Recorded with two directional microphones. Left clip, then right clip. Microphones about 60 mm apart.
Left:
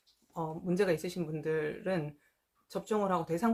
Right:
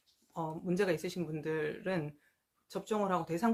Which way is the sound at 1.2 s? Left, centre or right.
Centre.